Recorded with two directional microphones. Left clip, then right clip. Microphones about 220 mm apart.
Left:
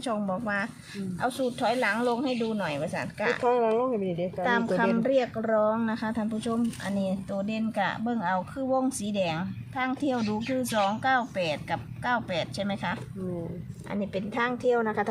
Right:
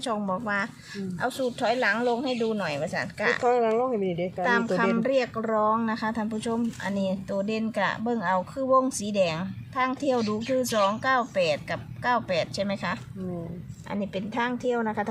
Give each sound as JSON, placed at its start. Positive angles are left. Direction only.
{"t": 0.0, "sound": "a woman's voice", "side_deg": -30}
{"t": 3.4, "sound": "speech", "side_deg": -10}
{"t": 4.4, "sound": "a woman's voice", "side_deg": -25}
{"t": 13.9, "sound": "a woman's voice", "side_deg": 0}